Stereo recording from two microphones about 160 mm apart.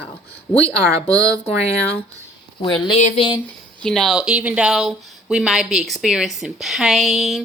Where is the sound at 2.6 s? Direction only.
30° left (ahead or behind).